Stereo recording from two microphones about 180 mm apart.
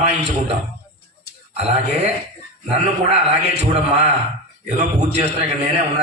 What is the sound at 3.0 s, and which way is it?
Speech, 35° right (ahead or behind).